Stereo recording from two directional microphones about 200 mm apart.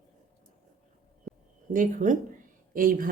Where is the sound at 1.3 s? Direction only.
5° left (ahead or behind).